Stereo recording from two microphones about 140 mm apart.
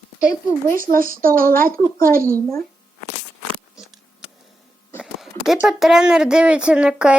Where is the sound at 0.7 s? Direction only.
80° right.